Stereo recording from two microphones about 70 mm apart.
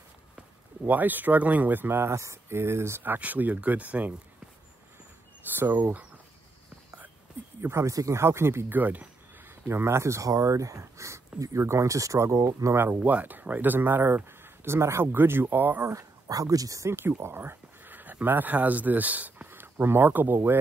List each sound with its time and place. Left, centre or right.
0.8 s speech: right
3.0 s speech: right
5.5 s speech: right
7.6 s speech: right
9.7 s speech: right
11.6 s speech: right
13.0 s speech: right
15.8 s speech: right